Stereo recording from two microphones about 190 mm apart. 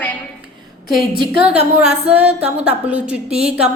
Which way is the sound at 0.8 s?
50° left (ahead or behind).